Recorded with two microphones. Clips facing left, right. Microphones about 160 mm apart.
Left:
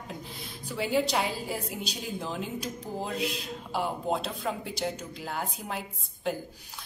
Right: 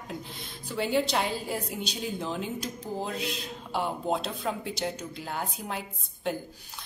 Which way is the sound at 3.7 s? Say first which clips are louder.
Right 1 dB; centre (ahead or behind).